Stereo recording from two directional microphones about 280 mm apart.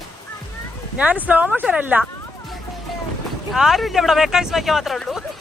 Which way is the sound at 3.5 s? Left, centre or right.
Centre.